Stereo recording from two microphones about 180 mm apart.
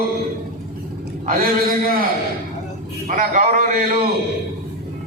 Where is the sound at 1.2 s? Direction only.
55° right (ahead or behind).